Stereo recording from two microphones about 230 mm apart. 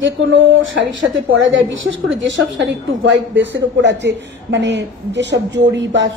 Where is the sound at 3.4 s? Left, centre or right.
Right.